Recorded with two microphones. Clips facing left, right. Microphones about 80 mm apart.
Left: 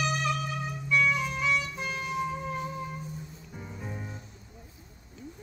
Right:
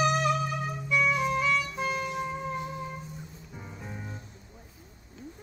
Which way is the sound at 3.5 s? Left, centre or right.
Centre.